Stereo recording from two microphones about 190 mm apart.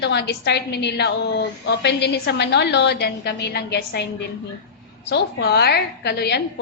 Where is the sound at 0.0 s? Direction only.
60° left (ahead or behind).